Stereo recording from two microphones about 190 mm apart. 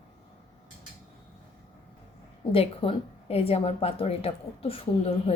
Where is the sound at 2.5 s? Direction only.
30° left (ahead or behind).